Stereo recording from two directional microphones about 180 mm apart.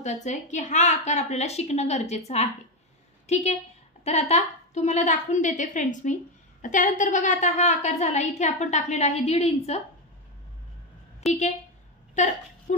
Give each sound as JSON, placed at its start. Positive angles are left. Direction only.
{"t": 0.0, "sound": "a woman's voice", "side_deg": 40}
{"t": 4.0, "sound": "a woman's voice", "side_deg": 35}
{"t": 11.2, "sound": "speech", "side_deg": 0}
{"t": 12.2, "sound": "a woman's voice", "side_deg": 40}